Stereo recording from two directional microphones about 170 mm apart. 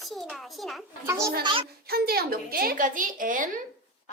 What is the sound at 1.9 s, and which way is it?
A woman's voice, 65° right (ahead or behind).